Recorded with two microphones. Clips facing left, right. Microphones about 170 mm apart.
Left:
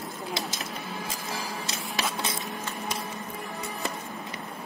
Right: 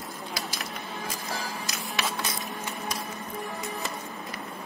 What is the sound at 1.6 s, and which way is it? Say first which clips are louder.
Printer: even; 25° left (ahead or behind).